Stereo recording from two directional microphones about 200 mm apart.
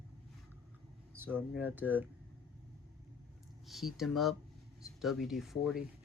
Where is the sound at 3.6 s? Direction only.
Centre (ahead or behind).